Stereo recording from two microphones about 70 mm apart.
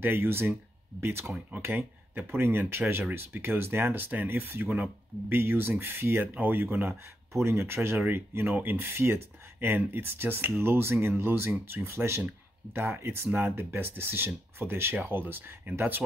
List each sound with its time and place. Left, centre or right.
0.0 s speech: right
1.2 s speech: centre
1.6 s speech: right
7.3 s speech: right